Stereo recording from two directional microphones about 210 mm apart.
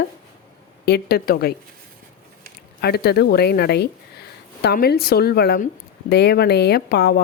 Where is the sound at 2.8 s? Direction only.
50° left (ahead or behind).